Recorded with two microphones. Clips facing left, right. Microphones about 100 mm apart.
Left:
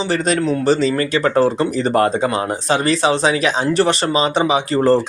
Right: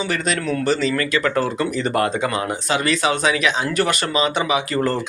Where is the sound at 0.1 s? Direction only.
30° left (ahead or behind).